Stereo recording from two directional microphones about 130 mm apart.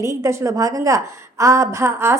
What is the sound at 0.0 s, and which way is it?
A woman's voice, 20° right (ahead or behind).